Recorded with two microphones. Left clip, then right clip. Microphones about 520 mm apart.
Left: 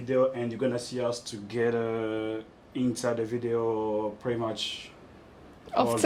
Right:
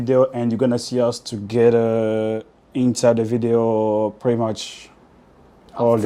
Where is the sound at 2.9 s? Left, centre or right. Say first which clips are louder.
Right 15 dB; right.